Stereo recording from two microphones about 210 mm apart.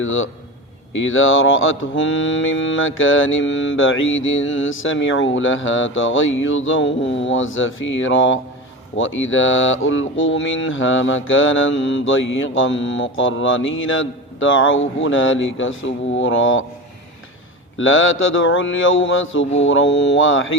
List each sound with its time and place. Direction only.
0.0 s mantra: 70° left (ahead or behind)
15.0 s speech: 65° left (ahead or behind)
17.7 s mantra: 70° left (ahead or behind)
19.6 s speech: 60° left (ahead or behind)